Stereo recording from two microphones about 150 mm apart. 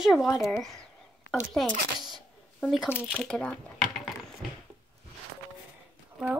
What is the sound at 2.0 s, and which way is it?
Shuffling cards, centre (ahead or behind).